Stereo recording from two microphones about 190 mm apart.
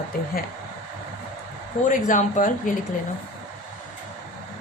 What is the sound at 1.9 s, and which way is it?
Speech, 40° left (ahead or behind).